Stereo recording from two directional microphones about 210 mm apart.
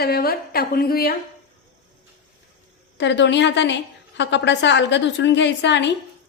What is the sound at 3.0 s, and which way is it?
A woman's voice, 60° left (ahead or behind).